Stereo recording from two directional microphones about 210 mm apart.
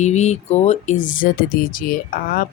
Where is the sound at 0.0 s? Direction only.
35° left (ahead or behind).